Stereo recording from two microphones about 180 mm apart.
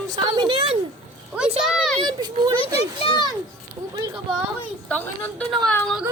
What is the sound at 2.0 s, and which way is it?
Speech, 25° right (ahead or behind).